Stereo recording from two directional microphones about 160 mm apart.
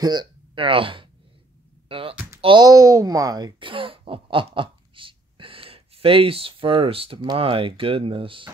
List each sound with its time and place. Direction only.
0.0 s speech: 25° right (ahead or behind)